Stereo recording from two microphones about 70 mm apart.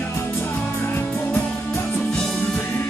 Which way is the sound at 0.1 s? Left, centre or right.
Left.